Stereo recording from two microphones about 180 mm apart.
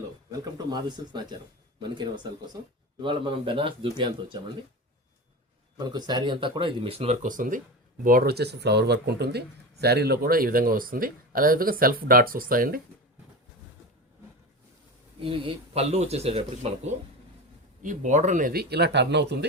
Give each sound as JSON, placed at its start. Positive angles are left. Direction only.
{"t": 0.3, "sound": "speech", "side_deg": -25}
{"t": 5.7, "sound": "a man's voice", "side_deg": -20}
{"t": 15.2, "sound": "speech", "side_deg": -30}